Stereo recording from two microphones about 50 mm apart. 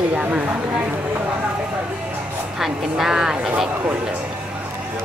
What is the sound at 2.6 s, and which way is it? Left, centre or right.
A woman's voice, centre.